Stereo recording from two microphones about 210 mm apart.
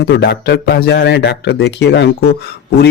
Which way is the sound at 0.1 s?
50° left (ahead or behind).